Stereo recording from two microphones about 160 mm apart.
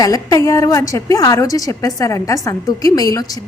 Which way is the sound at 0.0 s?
20° left (ahead or behind).